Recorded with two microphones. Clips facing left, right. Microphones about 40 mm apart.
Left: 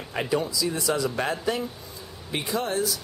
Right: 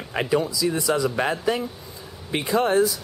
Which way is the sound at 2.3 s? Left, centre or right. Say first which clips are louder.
Right 6 dB; right.